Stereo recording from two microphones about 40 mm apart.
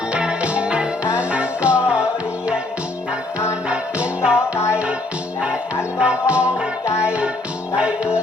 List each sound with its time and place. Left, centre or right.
0.1 s music: right
3.7 s music: right
6.0 s music: right